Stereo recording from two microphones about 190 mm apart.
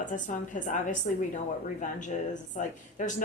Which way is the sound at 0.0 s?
40° left (ahead or behind).